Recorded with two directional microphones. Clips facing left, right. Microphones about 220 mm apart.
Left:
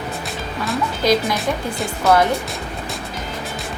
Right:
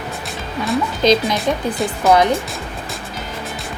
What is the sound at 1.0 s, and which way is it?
Speech, 20° right (ahead or behind).